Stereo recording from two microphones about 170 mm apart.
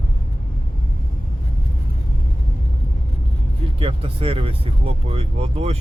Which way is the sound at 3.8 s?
35° right (ahead or behind).